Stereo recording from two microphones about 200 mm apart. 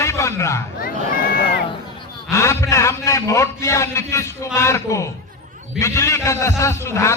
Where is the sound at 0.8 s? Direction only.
45° left (ahead or behind).